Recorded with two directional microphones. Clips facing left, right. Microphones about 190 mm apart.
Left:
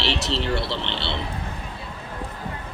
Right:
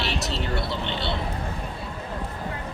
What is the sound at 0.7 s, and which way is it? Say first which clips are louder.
Speech: even; 75° left (ahead or behind).